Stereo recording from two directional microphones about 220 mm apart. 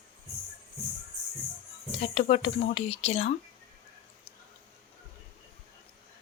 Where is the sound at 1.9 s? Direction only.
25° left (ahead or behind).